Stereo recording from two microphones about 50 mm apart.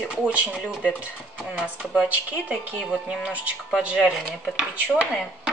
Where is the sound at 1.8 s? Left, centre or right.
Centre.